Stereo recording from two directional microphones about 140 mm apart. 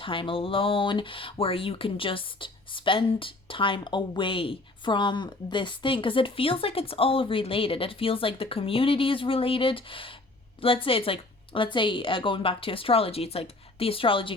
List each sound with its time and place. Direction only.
0.0 s speech: 40° left (ahead or behind)